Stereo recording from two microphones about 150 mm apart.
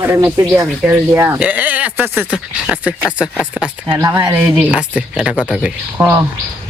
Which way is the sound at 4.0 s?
20° right (ahead or behind).